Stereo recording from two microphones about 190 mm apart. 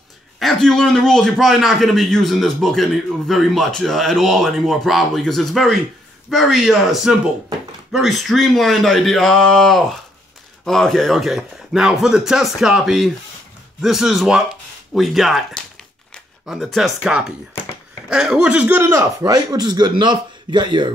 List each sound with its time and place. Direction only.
0.4 s a man's voice: centre (ahead or behind); by 20.9 s 25° right (ahead or behind)